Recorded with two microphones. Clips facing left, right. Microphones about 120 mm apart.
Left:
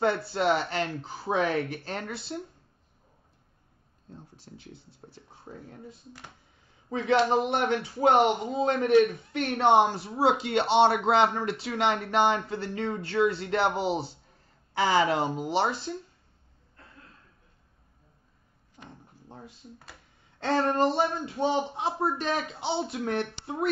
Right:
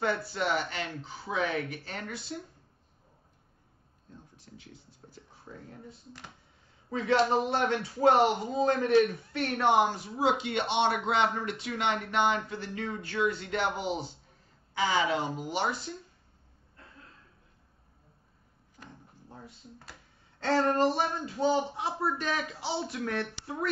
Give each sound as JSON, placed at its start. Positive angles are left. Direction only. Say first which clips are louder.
{"t": 0.0, "sound": "speech", "louder": "left 5 dB", "side_deg": 30}
{"t": 4.5, "sound": "a man's voice", "louder": "left 3 dB", "side_deg": 40}
{"t": 6.9, "sound": "a man's voice", "louder": "left 2 dB", "side_deg": 20}
{"t": 14.9, "sound": "speech", "louder": "left 5 dB", "side_deg": 40}
{"t": 15.3, "sound": "a man's voice", "louder": "left 4 dB", "side_deg": 25}
{"t": 19.2, "sound": "cash register", "louder": "left 2 dB", "side_deg": 25}
{"t": 20.7, "sound": "a man's voice", "louder": "left 2 dB", "side_deg": 25}